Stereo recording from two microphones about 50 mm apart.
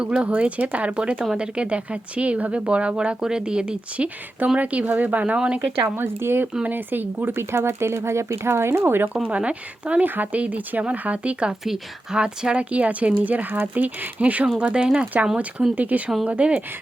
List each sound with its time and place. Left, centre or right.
0.0 s speech: centre
5.5 s speech: right
6.7 s speech: right
7.3 s speech: right
9.3 s speech: right
12.7 s speech: right
14.6 s speech: centre
15.1 s speech: right